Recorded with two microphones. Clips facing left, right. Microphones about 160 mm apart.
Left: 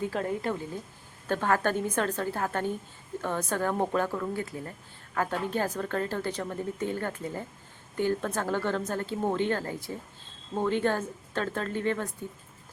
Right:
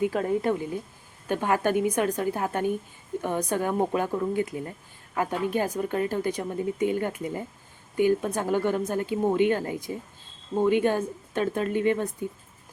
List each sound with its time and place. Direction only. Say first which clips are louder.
0.0 s a woman's voice: right 5 dB; 20° right (ahead or behind)